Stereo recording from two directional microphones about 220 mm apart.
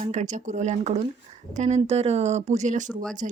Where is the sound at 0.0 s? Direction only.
30° right (ahead or behind).